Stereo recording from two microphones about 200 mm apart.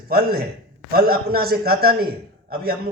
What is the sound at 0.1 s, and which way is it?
A man's voice, 50° right (ahead or behind).